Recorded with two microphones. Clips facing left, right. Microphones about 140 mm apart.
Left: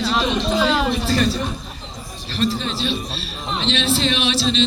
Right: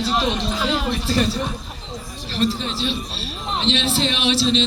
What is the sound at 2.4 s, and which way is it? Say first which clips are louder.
A man's voice: even; 25° right (ahead or behind).